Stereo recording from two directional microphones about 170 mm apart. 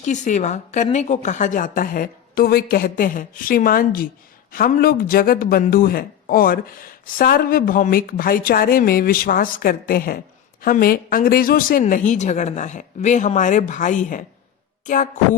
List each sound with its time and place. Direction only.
0.0 s a woman's voice: 45° left (ahead or behind)